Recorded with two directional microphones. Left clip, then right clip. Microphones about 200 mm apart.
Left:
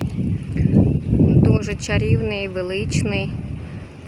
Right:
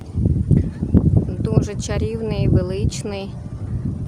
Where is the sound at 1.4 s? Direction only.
5° left (ahead or behind).